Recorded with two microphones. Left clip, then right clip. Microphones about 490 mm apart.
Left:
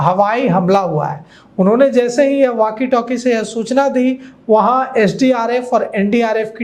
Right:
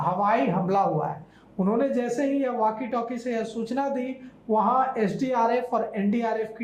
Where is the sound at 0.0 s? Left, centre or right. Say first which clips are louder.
Left 10 dB; left.